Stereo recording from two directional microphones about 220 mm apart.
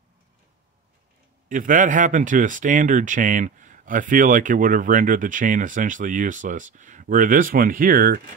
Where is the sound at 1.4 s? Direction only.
35° right (ahead or behind).